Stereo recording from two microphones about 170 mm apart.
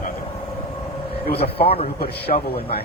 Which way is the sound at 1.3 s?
35° left (ahead or behind).